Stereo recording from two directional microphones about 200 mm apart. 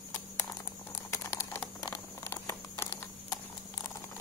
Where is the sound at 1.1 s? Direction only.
15° left (ahead or behind).